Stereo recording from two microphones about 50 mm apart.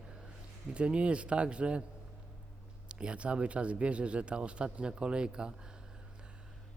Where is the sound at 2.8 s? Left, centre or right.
Right.